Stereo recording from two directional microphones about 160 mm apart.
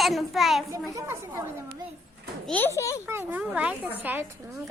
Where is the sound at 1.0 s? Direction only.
15° right (ahead or behind).